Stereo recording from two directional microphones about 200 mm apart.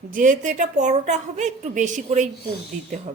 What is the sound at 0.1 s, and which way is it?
A woman's voice, 40° right (ahead or behind).